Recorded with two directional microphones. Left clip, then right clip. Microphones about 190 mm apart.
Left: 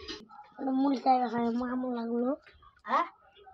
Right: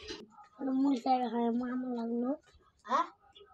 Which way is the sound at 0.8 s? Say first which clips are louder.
Left 5 dB; centre (ahead or behind).